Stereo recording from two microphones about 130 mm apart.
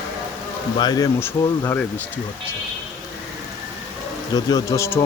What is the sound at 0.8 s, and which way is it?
A man's voice, 30° left (ahead or behind).